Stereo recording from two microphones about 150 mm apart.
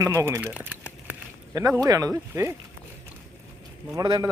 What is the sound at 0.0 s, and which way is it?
Speech, 20° right (ahead or behind).